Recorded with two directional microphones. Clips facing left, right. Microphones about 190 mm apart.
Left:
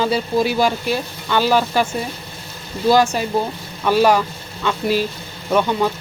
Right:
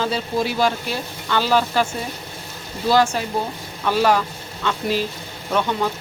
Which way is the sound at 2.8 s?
10° left (ahead or behind).